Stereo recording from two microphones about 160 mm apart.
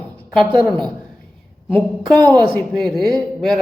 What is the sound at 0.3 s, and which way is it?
Speech, 5° left (ahead or behind).